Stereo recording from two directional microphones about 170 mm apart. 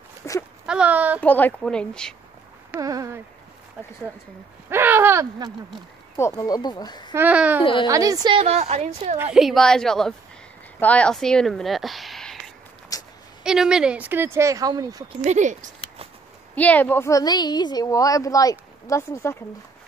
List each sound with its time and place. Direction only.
0.2 s a sound: 15° left (ahead or behind)
0.7 s a sound: 5° right (ahead or behind)
1.2 s a woman's voice: 10° left (ahead or behind)
2.7 s speech: 20° right (ahead or behind)
4.6 s a sound: 15° right (ahead or behind)
6.1 s a woman's voice: 20° left (ahead or behind)
7.2 s speech: 10° right (ahead or behind)
7.8 s a woman's voice: 20° right (ahead or behind); by 9.2 s 40° right (ahead or behind)
9.2 s a woman's voice: centre (ahead or behind)
12.9 s a sound: 20° left (ahead or behind)
13.4 s speech: 5° right (ahead or behind); by 15.0 s 20° right (ahead or behind)
15.2 s speech: 45° right (ahead or behind)
16.5 s a woman's voice: 10° left (ahead or behind)